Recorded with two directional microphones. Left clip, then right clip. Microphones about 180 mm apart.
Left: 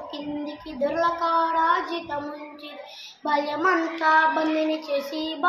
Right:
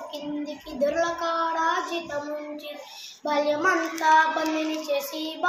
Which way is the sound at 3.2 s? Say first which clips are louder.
Even; 15° left (ahead or behind).